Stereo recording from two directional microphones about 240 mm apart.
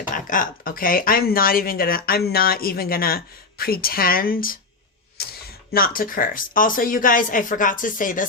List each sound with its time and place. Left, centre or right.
0.1 s speech: left
5.2 s a sound: left
5.7 s speech: left